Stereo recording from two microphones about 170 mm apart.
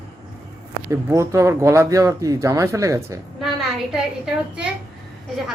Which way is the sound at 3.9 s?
5° right (ahead or behind).